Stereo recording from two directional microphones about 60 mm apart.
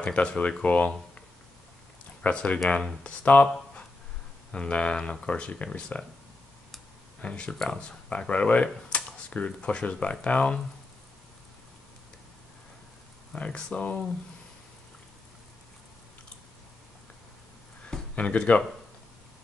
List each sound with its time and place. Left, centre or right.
0.0 s speech: centre
2.2 s speech: left
4.5 s speech: centre
7.2 s speech: centre
13.3 s speech: centre
18.1 s speech: left